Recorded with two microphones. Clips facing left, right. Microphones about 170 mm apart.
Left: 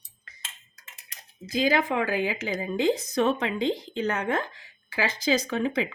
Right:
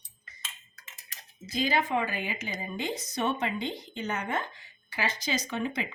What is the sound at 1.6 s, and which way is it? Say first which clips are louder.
Speech: left 4 dB; 90° left.